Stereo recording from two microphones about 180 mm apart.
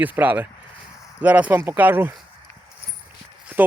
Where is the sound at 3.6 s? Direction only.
10° right (ahead or behind).